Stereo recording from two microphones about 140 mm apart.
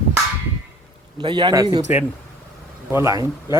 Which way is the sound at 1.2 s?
35° right (ahead or behind).